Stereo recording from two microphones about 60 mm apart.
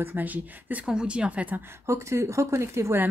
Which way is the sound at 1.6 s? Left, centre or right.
Right.